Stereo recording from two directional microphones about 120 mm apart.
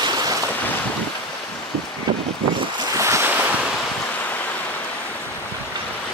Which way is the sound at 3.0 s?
25° right (ahead or behind).